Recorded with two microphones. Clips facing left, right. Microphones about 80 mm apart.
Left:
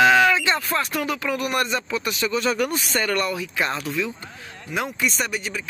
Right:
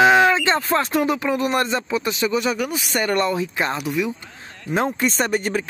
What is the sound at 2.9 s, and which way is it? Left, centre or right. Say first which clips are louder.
Speech: right 3 dB; right.